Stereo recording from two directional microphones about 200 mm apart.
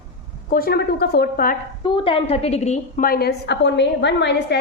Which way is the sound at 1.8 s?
25° left (ahead or behind).